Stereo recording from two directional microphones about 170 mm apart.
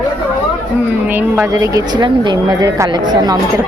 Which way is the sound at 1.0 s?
10° right (ahead or behind).